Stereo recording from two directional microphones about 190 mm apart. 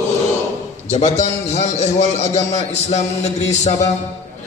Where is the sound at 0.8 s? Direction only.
35° left (ahead or behind).